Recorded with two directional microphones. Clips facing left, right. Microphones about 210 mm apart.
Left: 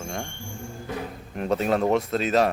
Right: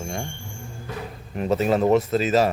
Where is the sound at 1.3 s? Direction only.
Centre (ahead or behind).